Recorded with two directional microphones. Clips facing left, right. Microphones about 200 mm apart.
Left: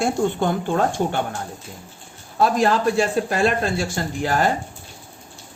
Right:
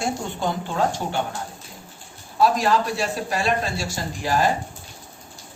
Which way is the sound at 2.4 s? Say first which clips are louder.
Left 1 dB; 50° left (ahead or behind).